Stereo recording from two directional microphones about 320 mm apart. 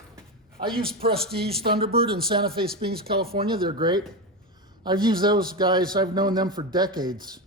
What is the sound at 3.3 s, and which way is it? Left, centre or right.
A man's voice, centre.